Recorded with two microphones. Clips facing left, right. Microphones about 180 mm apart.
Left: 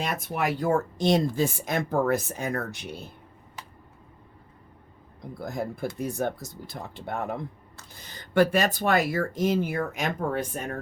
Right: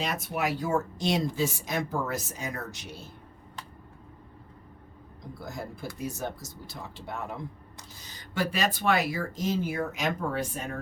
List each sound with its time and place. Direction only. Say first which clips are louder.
0.0 s speech: left 2 dB; 55° left (ahead or behind)
5.4 s speech: left 7 dB; 55° left (ahead or behind)